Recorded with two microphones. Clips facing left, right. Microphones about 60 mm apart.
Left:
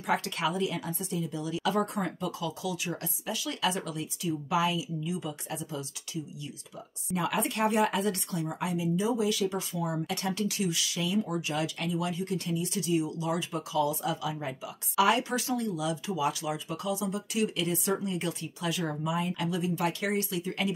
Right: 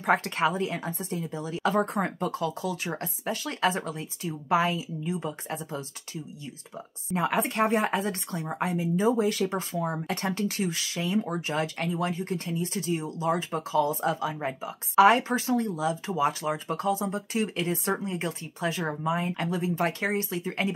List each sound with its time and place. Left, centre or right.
0.0 s speech: right
7.1 s speech: right